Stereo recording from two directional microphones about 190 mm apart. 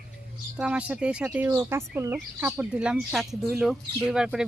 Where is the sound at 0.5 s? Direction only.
5° right (ahead or behind).